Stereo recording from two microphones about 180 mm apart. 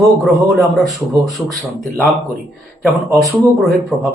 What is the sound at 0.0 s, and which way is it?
Speech, centre (ahead or behind).